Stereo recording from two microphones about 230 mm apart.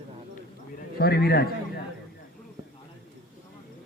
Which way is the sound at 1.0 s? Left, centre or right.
Left.